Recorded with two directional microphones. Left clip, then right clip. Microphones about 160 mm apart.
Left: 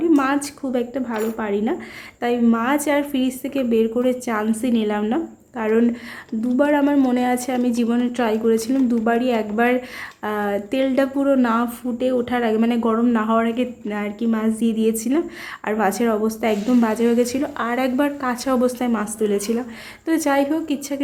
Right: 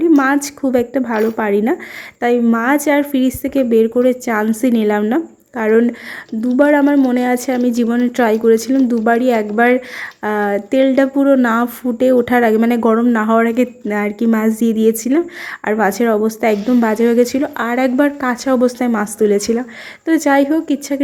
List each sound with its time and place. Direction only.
0.0 s a woman's voice: 30° right (ahead or behind)
2.2 s a woman's voice: 30° right (ahead or behind)